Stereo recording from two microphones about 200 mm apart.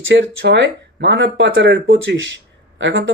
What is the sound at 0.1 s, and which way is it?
A man's voice, 60° right (ahead or behind).